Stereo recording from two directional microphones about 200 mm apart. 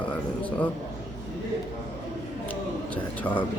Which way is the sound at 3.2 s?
10° left (ahead or behind).